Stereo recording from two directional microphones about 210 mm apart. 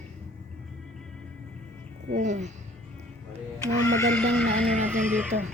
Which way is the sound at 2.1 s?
35° right (ahead or behind).